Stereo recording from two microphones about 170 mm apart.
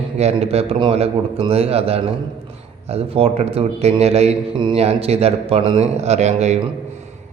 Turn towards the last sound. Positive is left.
turn(degrees=-40)  # may be behind; listen again after turning